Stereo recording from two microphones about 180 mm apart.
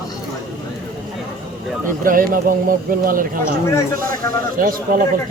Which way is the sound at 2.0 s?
50° right (ahead or behind).